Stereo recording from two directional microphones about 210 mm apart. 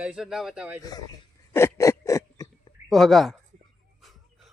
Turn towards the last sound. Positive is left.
turn(degrees=0)  # may be behind; listen again after turning